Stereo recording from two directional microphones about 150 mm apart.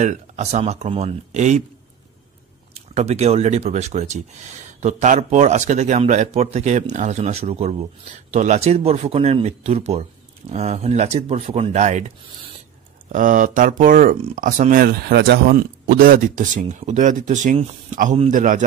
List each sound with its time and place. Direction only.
0.0 s speech: 50° right (ahead or behind)
2.9 s speech: 45° right (ahead or behind)
13.1 s speech: 60° right (ahead or behind)